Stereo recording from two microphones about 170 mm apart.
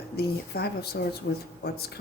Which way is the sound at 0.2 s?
70° left (ahead or behind).